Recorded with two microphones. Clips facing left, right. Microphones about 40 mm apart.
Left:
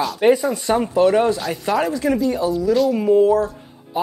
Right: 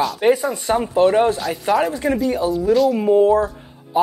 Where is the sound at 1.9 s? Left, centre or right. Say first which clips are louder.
Even; right.